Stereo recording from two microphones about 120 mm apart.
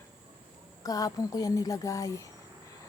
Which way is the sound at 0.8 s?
30° left (ahead or behind).